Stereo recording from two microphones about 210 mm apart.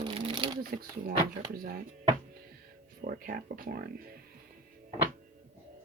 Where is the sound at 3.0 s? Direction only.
40° right (ahead or behind).